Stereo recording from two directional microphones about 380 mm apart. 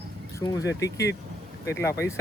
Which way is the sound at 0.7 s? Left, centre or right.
Left.